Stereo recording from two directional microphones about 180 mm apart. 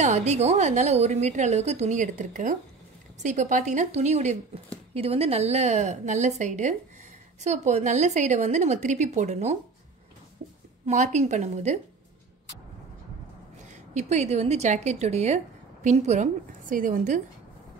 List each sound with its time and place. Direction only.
0.0 s speech: 40° right (ahead or behind)
10.9 s speech: 40° right (ahead or behind)
13.9 s speech: 40° right (ahead or behind)